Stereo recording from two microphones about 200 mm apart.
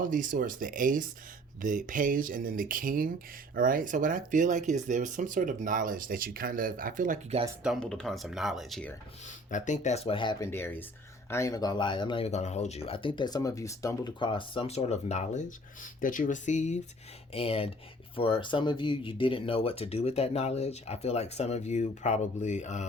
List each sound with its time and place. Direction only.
0.0 s speech: 40° right (ahead or behind)
7.6 s speech: centre (ahead or behind)
9.5 s speech: 40° left (ahead or behind)
10.5 s speech: 10° left (ahead or behind); by 22.9 s 35° left (ahead or behind)